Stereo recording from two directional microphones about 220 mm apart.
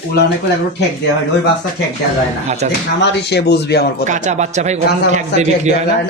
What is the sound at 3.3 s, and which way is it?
Speech, 50° left (ahead or behind).